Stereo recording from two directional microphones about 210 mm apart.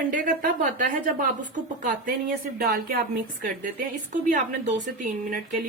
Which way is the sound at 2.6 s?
45° right (ahead or behind).